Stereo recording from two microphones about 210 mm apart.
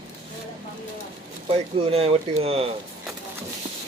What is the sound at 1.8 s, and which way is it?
Speech, 30° right (ahead or behind).